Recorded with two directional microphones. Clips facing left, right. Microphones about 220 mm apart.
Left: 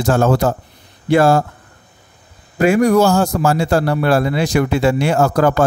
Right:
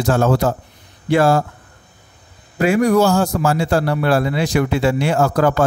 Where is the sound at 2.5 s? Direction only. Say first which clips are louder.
Left 2 dB; 45° left (ahead or behind).